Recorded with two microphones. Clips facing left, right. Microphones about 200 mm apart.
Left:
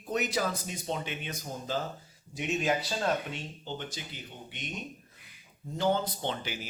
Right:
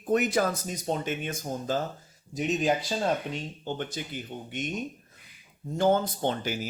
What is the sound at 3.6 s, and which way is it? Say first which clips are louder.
Speech: right 6 dB; 55° right (ahead or behind).